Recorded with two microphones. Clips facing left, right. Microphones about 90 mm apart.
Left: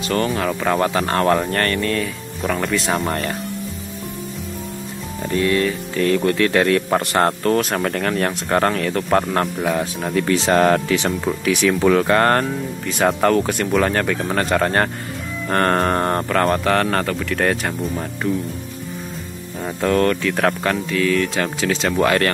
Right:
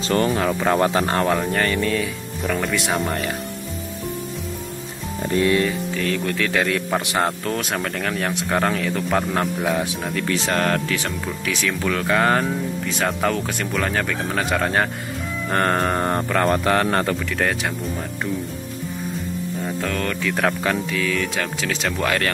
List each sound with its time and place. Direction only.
0.0 s speech: 30° right (ahead or behind)
0.5 s speech: 15° right (ahead or behind)
1.2 s speech: 5° right (ahead or behind)
5.3 s speech: 20° right (ahead or behind)
5.9 s speech: 5° left (ahead or behind)
10.2 s speech: 30° left (ahead or behind)
11.9 s speech: 5° left (ahead or behind); by 17.2 s 25° right (ahead or behind)
17.3 s speech: centre (ahead or behind)
19.6 s speech: 5° left (ahead or behind)